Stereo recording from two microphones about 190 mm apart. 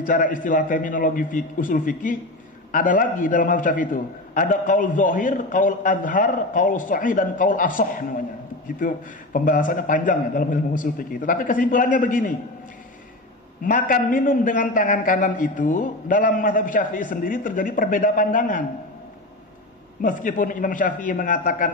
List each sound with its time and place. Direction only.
0.0 s a man's voice: 45° left (ahead or behind)
13.6 s a man's voice: 45° left (ahead or behind)
20.0 s a man's voice: 45° left (ahead or behind)